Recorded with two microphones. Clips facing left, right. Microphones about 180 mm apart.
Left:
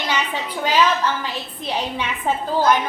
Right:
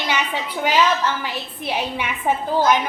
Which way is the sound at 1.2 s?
15° right (ahead or behind).